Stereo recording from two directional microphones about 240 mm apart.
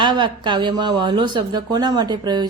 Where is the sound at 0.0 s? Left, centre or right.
Centre.